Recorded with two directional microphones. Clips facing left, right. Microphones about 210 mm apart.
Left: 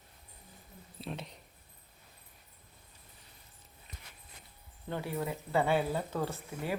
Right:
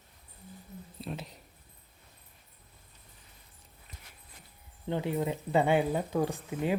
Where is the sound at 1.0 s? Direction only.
Centre (ahead or behind).